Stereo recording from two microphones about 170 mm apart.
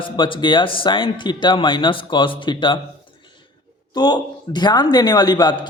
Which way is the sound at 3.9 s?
25° left (ahead or behind).